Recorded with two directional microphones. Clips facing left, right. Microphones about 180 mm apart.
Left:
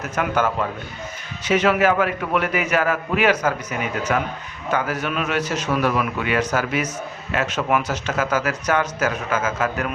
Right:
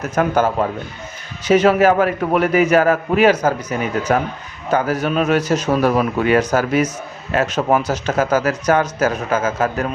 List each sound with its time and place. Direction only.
0.0 s speech: 35° right (ahead or behind)